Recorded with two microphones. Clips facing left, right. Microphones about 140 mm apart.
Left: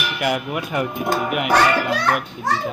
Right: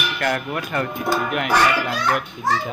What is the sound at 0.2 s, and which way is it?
Speech, 10° left (ahead or behind).